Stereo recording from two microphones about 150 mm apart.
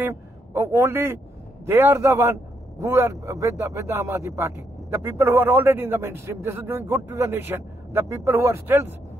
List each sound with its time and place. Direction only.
0.0 s a man's voice: 15° right (ahead or behind)